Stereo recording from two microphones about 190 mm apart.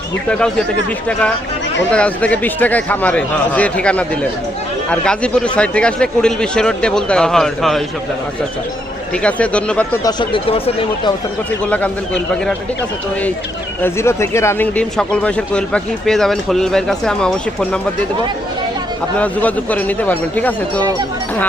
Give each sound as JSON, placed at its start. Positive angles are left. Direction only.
{"t": 0.3, "sound": "speech", "side_deg": 5}
{"t": 1.9, "sound": "a man's voice", "side_deg": 5}
{"t": 9.1, "sound": "a man's voice", "side_deg": 5}
{"t": 10.0, "sound": "speech", "side_deg": 20}
{"t": 11.6, "sound": "a man's voice", "side_deg": 5}
{"t": 13.8, "sound": "speech", "side_deg": 15}
{"t": 19.2, "sound": "a man's voice", "side_deg": 10}